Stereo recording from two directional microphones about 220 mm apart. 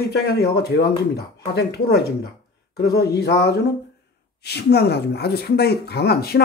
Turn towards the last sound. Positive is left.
turn(degrees=45)  # may be behind; listen again after turning